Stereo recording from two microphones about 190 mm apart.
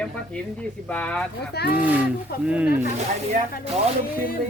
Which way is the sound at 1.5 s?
55° left (ahead or behind).